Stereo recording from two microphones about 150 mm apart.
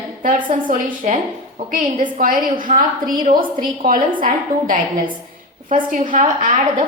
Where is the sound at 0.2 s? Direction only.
65° right (ahead or behind).